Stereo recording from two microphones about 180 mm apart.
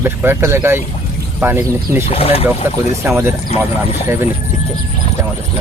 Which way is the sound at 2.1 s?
35° left (ahead or behind).